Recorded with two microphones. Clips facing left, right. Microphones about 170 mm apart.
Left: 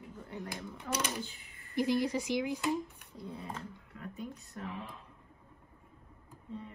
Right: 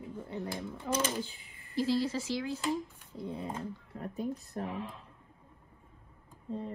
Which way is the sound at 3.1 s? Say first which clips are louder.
Right 5 dB; 25° right (ahead or behind).